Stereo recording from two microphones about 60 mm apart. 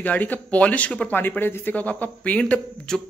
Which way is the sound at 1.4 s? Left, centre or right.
Left.